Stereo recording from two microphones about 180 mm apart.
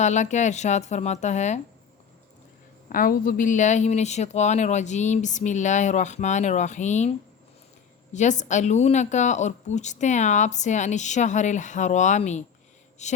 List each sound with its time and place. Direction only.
0.0 s a woman's voice: 40° left (ahead or behind)
2.9 s a woman's voice: 50° left (ahead or behind)
8.1 s a woman's voice: 40° left (ahead or behind)